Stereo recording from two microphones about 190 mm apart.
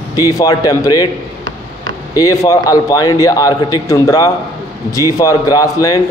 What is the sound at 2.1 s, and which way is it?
A man's voice, 20° left (ahead or behind).